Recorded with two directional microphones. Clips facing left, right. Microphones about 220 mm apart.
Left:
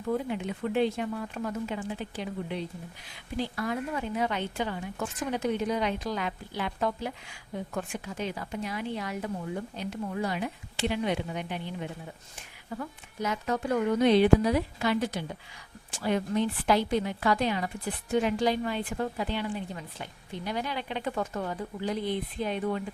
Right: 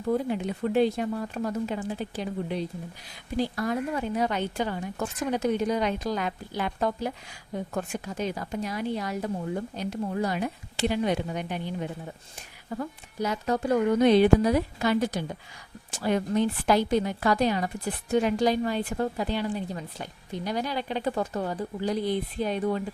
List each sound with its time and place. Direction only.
0.1 s a woman's voice: 40° right (ahead or behind)